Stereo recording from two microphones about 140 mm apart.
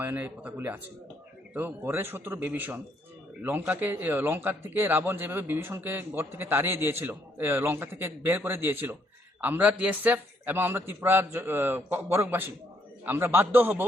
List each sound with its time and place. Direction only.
0.0 s a man's voice: 10° right (ahead or behind)